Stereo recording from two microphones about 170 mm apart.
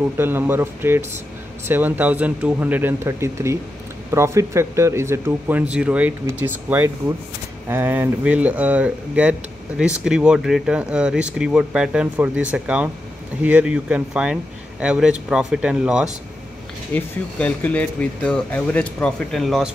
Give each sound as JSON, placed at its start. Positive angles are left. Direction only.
{"t": 0.2, "sound": "a man's voice", "side_deg": -15}
{"t": 16.9, "sound": "speech", "side_deg": 10}